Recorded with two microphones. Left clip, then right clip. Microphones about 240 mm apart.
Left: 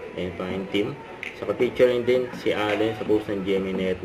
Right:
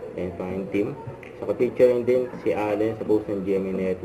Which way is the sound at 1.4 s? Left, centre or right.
Centre.